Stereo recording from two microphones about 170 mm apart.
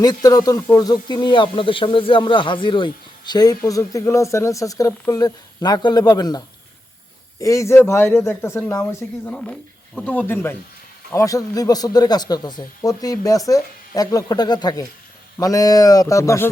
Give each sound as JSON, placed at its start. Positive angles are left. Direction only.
{"t": 0.0, "sound": "speech", "side_deg": 20}